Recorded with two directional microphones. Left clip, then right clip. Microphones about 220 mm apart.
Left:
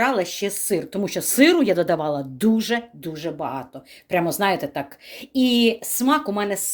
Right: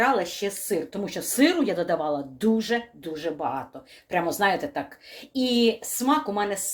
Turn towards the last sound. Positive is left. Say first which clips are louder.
# left 3 dB
turn(degrees=45)  # may be behind; listen again after turning